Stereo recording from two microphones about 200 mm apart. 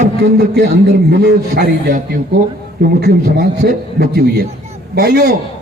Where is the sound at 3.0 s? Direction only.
55° right (ahead or behind).